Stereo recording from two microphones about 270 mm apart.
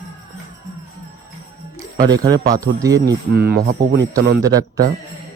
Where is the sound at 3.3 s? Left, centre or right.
Right.